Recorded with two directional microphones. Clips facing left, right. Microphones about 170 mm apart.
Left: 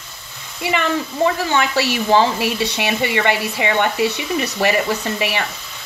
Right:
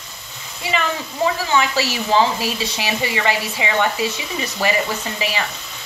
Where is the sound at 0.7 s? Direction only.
60° left (ahead or behind).